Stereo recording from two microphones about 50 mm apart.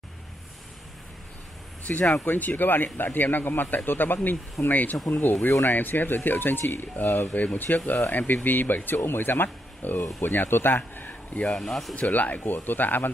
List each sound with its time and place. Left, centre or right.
1.9 s speech: left
10.8 s speech: left
11.5 s speech: centre
12.1 s speech: left